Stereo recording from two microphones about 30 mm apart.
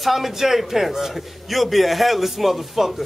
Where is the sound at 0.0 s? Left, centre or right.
Centre.